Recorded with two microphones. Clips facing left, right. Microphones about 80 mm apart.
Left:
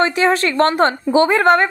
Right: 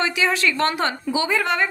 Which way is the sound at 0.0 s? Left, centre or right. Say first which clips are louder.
Left 6 dB; left.